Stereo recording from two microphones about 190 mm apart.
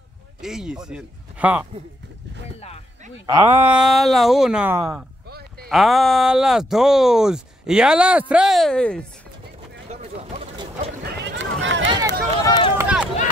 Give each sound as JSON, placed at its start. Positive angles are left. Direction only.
{"t": 0.4, "sound": "speech", "side_deg": -5}
{"t": 3.3, "sound": "speech", "side_deg": -10}
{"t": 9.8, "sound": "vehicle", "side_deg": -35}
{"t": 11.1, "sound": "a sound", "side_deg": -70}
{"t": 12.4, "sound": "run", "side_deg": 25}
{"t": 12.7, "sound": "run", "side_deg": -5}